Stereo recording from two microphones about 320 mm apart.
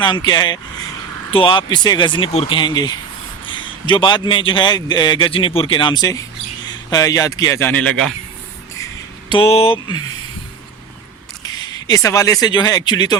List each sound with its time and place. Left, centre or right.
0.0 s a man's voice: centre
9.3 s a man's voice: centre
11.4 s speech: centre